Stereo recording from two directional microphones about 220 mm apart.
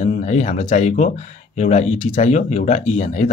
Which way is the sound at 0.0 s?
30° left (ahead or behind).